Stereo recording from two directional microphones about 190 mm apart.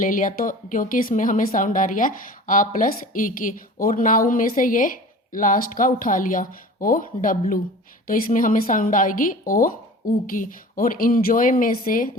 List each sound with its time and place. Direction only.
0.0 s speech: 45° left (ahead or behind)